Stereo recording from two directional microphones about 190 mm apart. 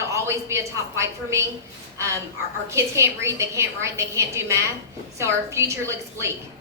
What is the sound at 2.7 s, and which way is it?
A woman's voice, 15° right (ahead or behind).